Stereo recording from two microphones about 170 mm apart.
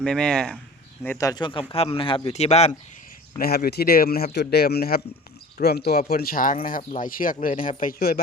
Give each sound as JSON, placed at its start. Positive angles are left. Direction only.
{"t": 0.0, "sound": "speech", "side_deg": 5}
{"t": 1.0, "sound": "speech", "side_deg": 15}
{"t": 3.3, "sound": "speech", "side_deg": 65}